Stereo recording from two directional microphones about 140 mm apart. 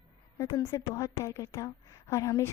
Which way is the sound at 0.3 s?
20° left (ahead or behind).